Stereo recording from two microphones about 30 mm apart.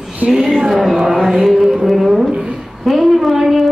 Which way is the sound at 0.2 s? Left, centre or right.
Right.